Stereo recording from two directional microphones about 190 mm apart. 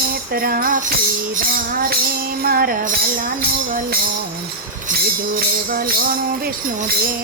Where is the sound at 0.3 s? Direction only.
50° right (ahead or behind).